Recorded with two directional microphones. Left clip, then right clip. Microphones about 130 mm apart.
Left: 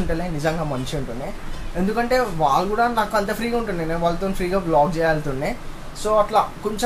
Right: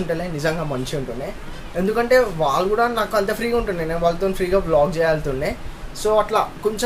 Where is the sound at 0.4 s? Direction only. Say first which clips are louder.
Right 1 dB; 15° right (ahead or behind).